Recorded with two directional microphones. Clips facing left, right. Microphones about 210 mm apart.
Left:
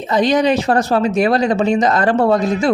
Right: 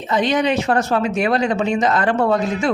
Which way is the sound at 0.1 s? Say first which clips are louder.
Left 4 dB; 40° left (ahead or behind).